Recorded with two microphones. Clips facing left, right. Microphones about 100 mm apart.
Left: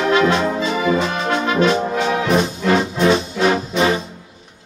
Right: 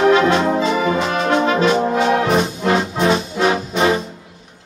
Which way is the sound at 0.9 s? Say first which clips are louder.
Right 2 dB; 5° right (ahead or behind).